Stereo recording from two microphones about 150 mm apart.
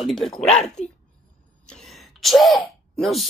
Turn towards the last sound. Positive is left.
turn(degrees=0)  # may be behind; listen again after turning